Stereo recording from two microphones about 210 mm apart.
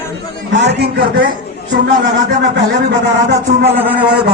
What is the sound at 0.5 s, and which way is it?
Speech, 55° right (ahead or behind).